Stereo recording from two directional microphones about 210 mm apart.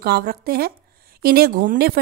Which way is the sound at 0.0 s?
45° right (ahead or behind).